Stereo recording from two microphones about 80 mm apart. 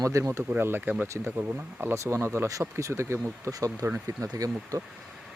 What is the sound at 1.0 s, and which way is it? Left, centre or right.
Speech, right.